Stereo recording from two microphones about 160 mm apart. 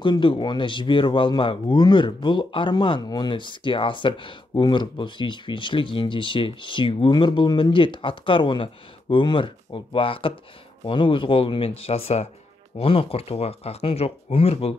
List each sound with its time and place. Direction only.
0.0 s speech: 30° left (ahead or behind)